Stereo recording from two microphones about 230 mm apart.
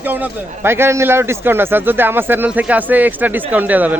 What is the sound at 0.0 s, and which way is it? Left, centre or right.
A man's voice, centre.